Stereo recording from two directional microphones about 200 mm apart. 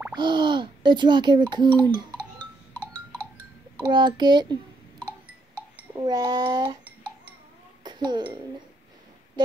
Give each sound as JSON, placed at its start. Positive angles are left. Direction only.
{"t": 0.1, "sound": "speech", "side_deg": -25}
{"t": 1.7, "sound": "speech", "side_deg": 10}
{"t": 3.8, "sound": "speech", "side_deg": -25}
{"t": 5.9, "sound": "speech", "side_deg": -20}
{"t": 7.8, "sound": "a child's voice", "side_deg": -20}